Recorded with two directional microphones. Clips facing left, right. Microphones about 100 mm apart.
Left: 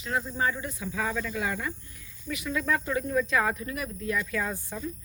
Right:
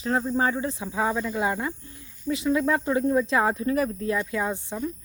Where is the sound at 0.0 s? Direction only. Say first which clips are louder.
Right 5 dB; 35° right (ahead or behind).